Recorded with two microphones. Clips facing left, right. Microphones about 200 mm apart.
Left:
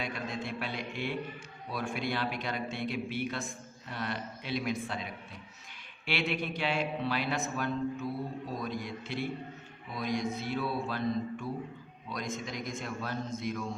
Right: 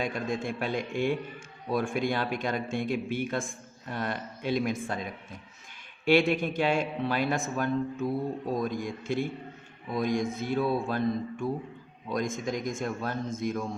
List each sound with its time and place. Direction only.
0.0 s a man's voice: 50° right (ahead or behind)